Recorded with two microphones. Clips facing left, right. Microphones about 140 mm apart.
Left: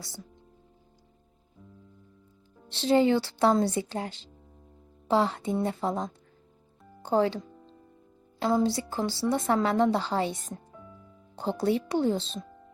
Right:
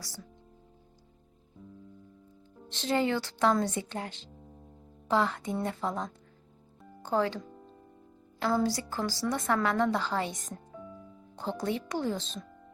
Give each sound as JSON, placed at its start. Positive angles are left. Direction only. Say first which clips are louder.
{"t": 2.6, "sound": "a woman's voice", "louder": "left 6 dB", "side_deg": 30}
{"t": 11.3, "sound": "a woman's voice", "louder": "left 6 dB", "side_deg": 30}